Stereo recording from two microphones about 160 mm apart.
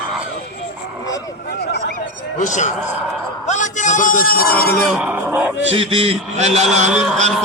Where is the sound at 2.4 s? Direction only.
50° left (ahead or behind).